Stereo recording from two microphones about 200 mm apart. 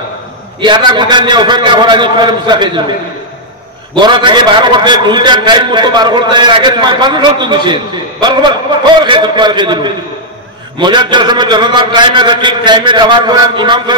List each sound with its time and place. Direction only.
0.6 s a man's voice: 20° right (ahead or behind)
3.9 s a man's voice: 25° right (ahead or behind)